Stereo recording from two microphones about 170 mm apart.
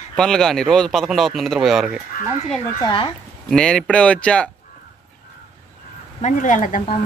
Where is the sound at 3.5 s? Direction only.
5° left (ahead or behind).